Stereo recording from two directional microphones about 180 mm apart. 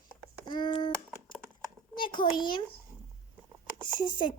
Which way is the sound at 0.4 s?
25° left (ahead or behind).